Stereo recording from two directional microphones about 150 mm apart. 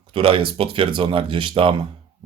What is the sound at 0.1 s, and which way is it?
A man's voice, 35° right (ahead or behind).